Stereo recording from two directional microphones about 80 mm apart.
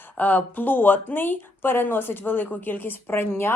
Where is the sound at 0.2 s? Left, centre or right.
Left.